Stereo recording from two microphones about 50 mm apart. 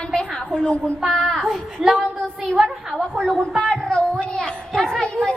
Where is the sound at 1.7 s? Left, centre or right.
Centre.